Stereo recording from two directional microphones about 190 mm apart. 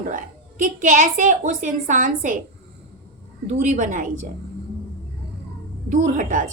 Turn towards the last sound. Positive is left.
turn(degrees=-45)  # may be behind; listen again after turning